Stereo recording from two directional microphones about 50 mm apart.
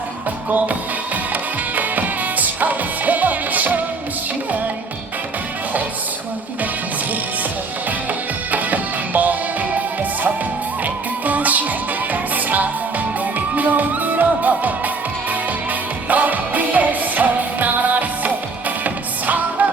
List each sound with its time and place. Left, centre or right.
0.5 s music: right
8.4 s music: right
16.0 s music: right